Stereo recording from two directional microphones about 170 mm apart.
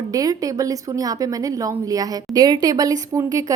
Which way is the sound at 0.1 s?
20° right (ahead or behind).